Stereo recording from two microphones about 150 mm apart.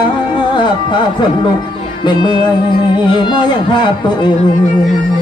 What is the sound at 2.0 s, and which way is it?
Speech, 30° left (ahead or behind).